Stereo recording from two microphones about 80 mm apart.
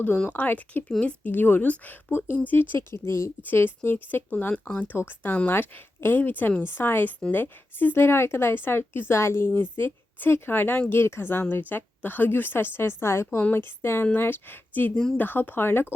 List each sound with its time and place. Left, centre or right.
0.3 s speech: left
2.7 s speech: left
3.4 s speech: left